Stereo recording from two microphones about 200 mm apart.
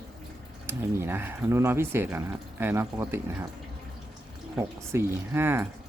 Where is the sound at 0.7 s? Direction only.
10° right (ahead or behind).